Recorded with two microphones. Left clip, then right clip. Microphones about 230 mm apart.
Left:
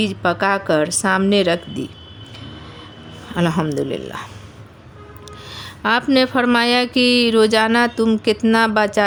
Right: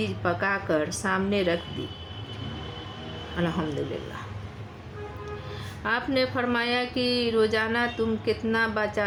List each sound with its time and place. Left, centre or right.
0.0 s a woman's voice: left
3.3 s a woman's voice: left
5.8 s a woman's voice: left